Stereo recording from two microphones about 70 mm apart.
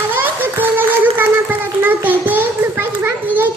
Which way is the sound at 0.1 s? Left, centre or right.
Right.